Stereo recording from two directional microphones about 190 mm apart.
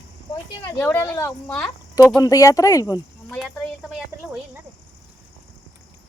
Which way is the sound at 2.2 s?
15° left (ahead or behind).